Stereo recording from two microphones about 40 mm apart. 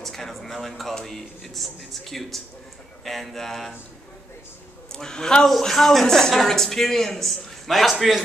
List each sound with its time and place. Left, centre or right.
0.0 s a sound: centre
1.0 s speech: centre
4.9 s a man's voice: centre